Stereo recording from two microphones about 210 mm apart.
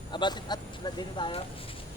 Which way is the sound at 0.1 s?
20° left (ahead or behind).